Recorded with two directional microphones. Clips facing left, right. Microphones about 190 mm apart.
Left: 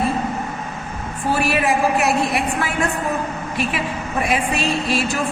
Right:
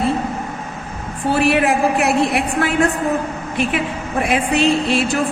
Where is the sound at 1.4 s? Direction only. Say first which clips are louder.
Right 4 dB; 60° right (ahead or behind).